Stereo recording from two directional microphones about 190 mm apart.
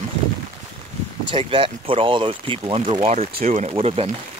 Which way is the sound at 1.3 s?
25° right (ahead or behind).